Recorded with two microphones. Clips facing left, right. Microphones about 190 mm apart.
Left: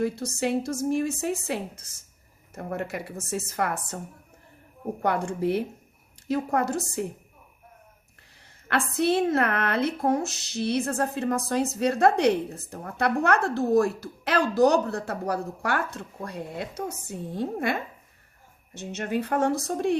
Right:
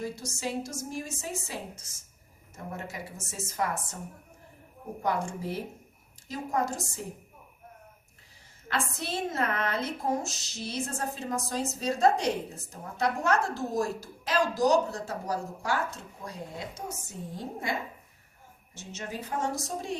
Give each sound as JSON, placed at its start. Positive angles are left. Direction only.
{"t": 0.0, "sound": "a woman's voice", "side_deg": 60}
{"t": 5.0, "sound": "a woman's voice", "side_deg": 65}
{"t": 8.6, "sound": "a woman's voice", "side_deg": 65}